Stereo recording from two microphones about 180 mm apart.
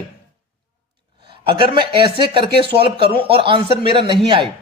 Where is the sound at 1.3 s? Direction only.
30° right (ahead or behind).